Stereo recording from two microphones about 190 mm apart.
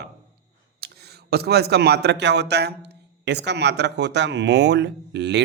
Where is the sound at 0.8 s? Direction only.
55° right (ahead or behind).